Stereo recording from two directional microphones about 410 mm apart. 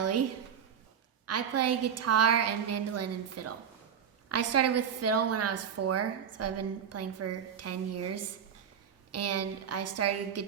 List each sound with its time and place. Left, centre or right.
0.0 s a woman's voice: right
1.3 s a woman's voice: right